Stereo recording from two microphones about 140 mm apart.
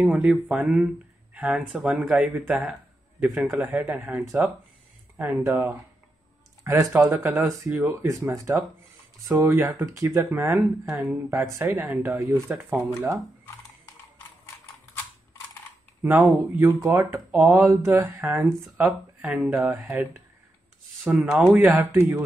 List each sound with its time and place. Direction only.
0.0 s speech: 5° right (ahead or behind)
4.2 s speech: 20° right (ahead or behind)
16.0 s speech: 15° right (ahead or behind)